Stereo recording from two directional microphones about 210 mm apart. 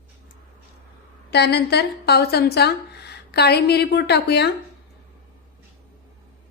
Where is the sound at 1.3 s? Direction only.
50° left (ahead or behind).